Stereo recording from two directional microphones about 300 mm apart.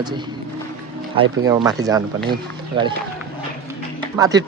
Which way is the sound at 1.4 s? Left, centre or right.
Centre.